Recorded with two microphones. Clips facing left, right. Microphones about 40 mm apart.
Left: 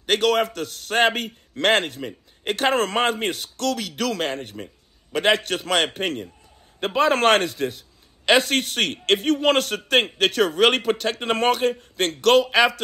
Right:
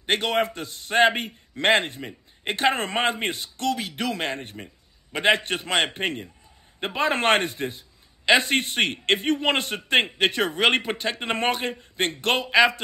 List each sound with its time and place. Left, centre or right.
0.0 s a man's voice: right